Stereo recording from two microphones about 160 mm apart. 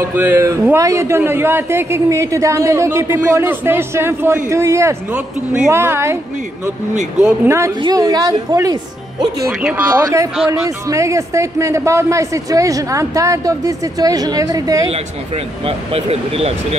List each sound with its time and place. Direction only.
0.1 s a man's voice: 10° right (ahead or behind)
7.2 s a man's voice: 5° right (ahead or behind)
7.8 s a man's voice: 25° right (ahead or behind)
9.5 s a man's voice: 5° right (ahead or behind)
14.9 s speech: 40° right (ahead or behind)